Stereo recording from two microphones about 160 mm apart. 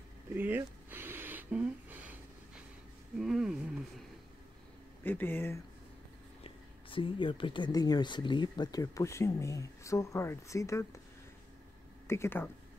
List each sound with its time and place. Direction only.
0.3 s a sound: 10° right (ahead or behind)
3.2 s roaring cats: 5° right (ahead or behind)
5.0 s speech: 10° left (ahead or behind)
6.4 s speech: 35° left (ahead or behind)
12.1 s speech: 15° left (ahead or behind)